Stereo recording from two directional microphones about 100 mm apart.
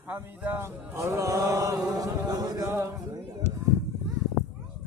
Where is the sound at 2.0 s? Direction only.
40° right (ahead or behind).